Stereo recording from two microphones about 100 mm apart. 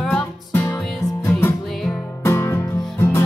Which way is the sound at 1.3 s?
25° left (ahead or behind).